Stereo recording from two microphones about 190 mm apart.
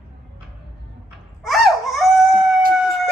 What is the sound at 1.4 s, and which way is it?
Crying, centre (ahead or behind).